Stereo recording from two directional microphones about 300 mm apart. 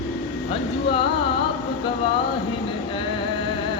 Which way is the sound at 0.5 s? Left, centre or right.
Centre.